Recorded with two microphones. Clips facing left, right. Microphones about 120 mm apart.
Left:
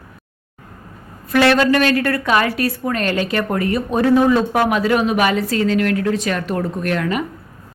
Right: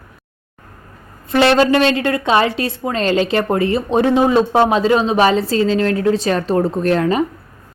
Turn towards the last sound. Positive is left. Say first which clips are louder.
# right 5 dB
turn(degrees=-30)  # may be behind; listen again after turning